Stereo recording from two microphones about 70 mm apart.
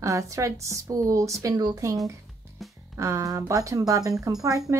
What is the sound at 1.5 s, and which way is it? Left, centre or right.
Speech, right.